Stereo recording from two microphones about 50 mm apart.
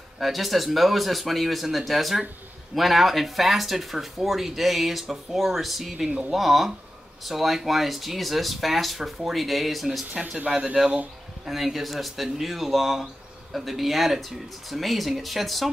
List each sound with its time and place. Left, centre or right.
0.2 s speech: centre
10.5 s speech: right
11.4 s speech: centre